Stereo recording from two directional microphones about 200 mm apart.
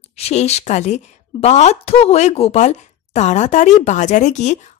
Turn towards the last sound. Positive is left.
turn(degrees=35)  # may be behind; listen again after turning